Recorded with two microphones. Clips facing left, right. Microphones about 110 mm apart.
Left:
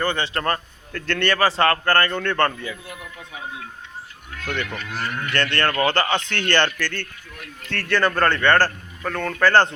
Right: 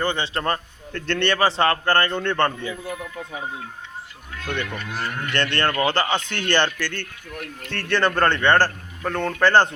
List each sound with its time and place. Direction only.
0.0 s a man's voice: 20° right (ahead or behind)
4.4 s a man's voice: 20° right (ahead or behind)
7.3 s speech: 55° right (ahead or behind)
7.7 s a man's voice: 20° right (ahead or behind)